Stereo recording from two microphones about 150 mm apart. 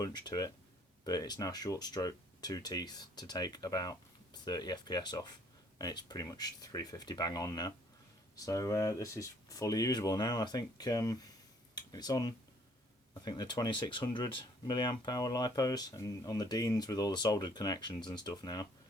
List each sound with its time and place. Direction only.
0.0 s speech: 30° left (ahead or behind)